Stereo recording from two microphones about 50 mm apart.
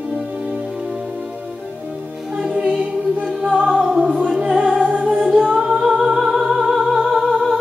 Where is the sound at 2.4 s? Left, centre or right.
Centre.